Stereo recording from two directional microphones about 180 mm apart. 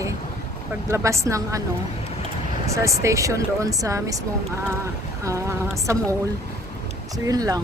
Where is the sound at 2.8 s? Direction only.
15° right (ahead or behind).